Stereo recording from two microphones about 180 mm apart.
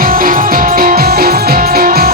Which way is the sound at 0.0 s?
50° right (ahead or behind).